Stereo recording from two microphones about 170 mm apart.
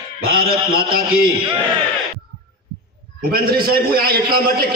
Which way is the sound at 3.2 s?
60° right (ahead or behind).